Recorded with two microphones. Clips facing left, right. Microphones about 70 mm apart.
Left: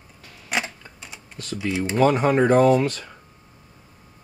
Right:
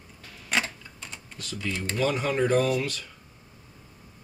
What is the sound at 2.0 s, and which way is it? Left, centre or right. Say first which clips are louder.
Speech: left 8 dB; left.